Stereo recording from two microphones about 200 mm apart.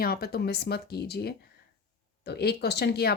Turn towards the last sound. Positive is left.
turn(degrees=55)  # may be behind; listen again after turning